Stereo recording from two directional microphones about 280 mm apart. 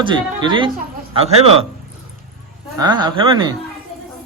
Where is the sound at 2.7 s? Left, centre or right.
Centre.